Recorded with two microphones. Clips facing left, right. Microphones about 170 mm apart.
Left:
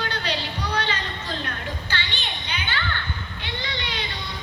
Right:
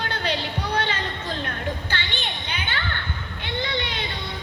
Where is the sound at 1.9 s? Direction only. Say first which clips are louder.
Right 1 dB; 50° right (ahead or behind).